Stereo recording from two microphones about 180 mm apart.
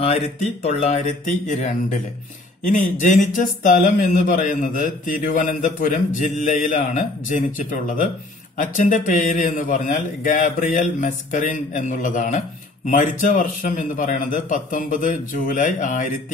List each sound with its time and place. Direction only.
0.6 s a man's voice: 35° left (ahead or behind)